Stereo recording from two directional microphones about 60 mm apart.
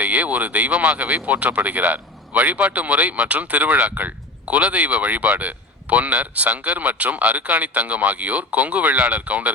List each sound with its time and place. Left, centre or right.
0.0 s speech: right